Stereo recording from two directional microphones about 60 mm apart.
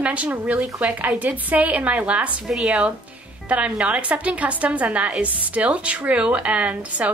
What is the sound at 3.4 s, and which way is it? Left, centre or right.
Speech, right.